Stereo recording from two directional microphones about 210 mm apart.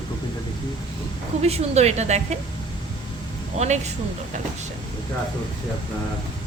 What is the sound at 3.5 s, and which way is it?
Speech, 30° right (ahead or behind).